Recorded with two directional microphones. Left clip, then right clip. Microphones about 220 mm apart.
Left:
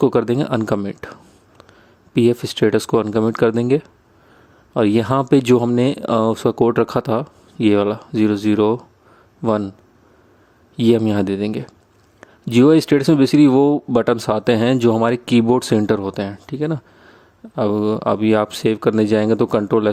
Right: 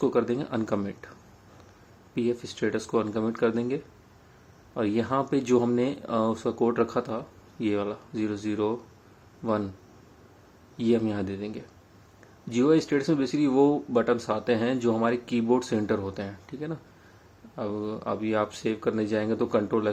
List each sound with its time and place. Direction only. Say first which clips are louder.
0.0 s speech: left 9 dB; 55° left (ahead or behind)
10.8 s speech: left 10 dB; 50° left (ahead or behind)